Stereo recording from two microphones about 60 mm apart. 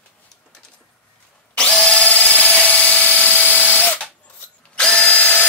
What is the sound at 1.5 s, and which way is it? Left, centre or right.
Drill, centre.